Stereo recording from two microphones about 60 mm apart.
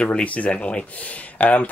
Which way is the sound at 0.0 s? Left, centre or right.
Left.